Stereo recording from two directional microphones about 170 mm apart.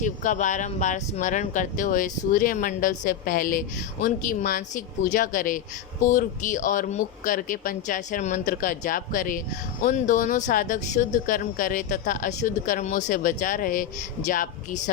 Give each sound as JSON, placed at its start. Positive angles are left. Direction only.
{"t": 0.0, "sound": "speech", "side_deg": 45}